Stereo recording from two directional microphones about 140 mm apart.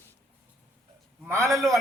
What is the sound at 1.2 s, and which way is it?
Speech, 20° right (ahead or behind).